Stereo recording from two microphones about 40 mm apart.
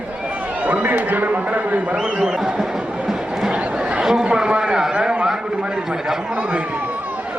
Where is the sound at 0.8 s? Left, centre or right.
Right.